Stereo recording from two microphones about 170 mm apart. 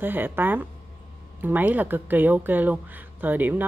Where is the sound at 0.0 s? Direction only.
10° right (ahead or behind).